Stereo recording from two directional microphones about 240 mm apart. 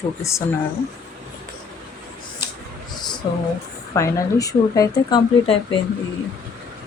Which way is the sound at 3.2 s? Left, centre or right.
Left.